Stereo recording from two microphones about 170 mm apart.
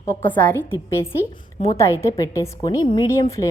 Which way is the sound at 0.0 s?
15° left (ahead or behind).